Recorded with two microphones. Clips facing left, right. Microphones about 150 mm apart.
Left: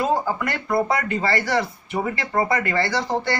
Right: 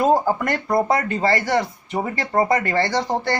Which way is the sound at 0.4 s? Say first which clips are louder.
Right 2 dB; 40° right (ahead or behind).